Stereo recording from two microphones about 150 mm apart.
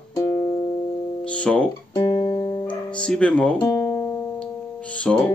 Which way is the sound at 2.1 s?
25° left (ahead or behind).